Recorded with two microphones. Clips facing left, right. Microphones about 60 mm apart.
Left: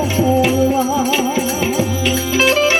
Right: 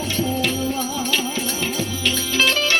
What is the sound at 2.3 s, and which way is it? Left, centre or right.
Music, left.